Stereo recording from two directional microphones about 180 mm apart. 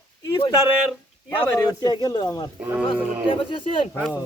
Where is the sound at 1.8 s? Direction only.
20° left (ahead or behind).